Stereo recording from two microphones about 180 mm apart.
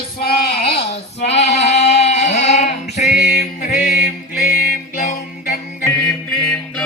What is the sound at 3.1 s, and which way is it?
Music, 55° left (ahead or behind).